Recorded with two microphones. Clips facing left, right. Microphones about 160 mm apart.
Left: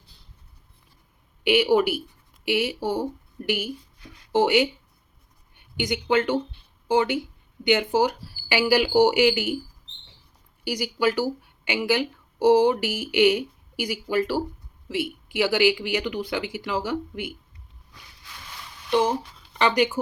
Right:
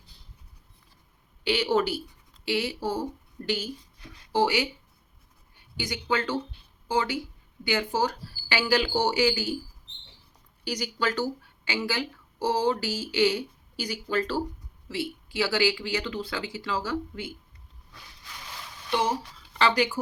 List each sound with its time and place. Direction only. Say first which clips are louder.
1.5 s speech: left 5 dB; 15° left (ahead or behind)
5.7 s speech: left 6 dB; 20° left (ahead or behind)
10.6 s speech: left 5 dB; 10° left (ahead or behind)
19.5 s speech: left 3 dB; 15° left (ahead or behind)